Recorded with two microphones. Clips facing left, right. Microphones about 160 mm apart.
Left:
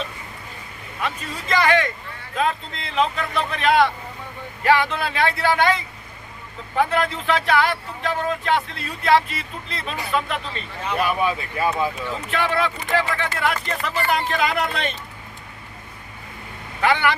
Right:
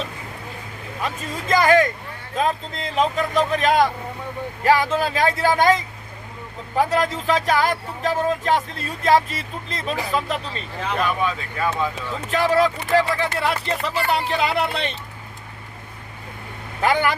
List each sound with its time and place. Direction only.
1.0 s speech: 45° right (ahead or behind)
11.0 s speech: 10° left (ahead or behind)
12.3 s speech: 40° right (ahead or behind)
16.8 s speech: 40° right (ahead or behind)